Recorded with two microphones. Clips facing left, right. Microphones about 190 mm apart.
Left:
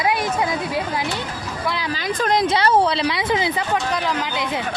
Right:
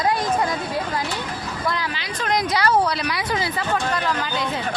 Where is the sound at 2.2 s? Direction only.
30° left (ahead or behind).